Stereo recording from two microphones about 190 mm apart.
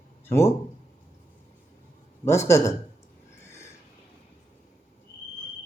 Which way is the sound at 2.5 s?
15° left (ahead or behind).